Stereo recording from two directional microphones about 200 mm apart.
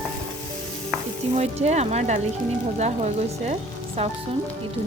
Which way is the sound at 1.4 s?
35° right (ahead or behind).